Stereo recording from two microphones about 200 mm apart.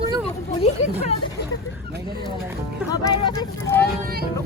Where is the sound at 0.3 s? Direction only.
30° left (ahead or behind).